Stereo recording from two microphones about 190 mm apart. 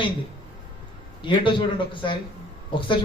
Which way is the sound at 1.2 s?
25° left (ahead or behind).